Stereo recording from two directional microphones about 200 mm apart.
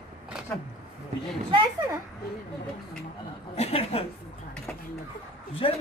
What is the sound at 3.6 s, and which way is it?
Speech, 30° left (ahead or behind).